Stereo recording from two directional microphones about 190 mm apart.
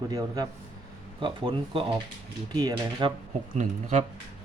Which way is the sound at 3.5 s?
40° right (ahead or behind).